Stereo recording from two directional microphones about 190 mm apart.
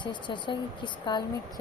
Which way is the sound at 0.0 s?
25° left (ahead or behind).